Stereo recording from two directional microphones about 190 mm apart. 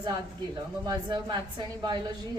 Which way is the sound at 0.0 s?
25° right (ahead or behind).